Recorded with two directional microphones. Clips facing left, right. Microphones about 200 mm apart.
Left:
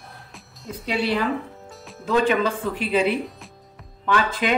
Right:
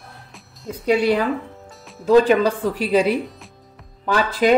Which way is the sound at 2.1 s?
40° right (ahead or behind).